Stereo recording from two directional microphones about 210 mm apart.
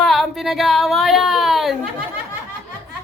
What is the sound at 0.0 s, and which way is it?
A woman's voice, centre (ahead or behind).